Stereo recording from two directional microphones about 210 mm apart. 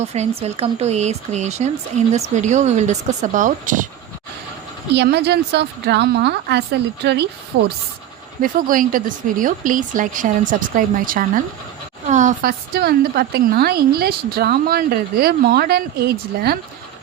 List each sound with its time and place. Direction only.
0.0 s speech: 30° right (ahead or behind)
4.9 s a woman's voice: 50° right (ahead or behind)
8.4 s a woman's voice: 40° right (ahead or behind)